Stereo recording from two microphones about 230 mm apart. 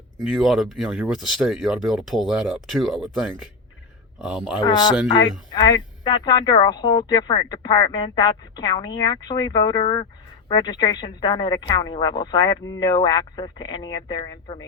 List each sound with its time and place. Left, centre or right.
0.2 s speech: centre
4.6 s speech: centre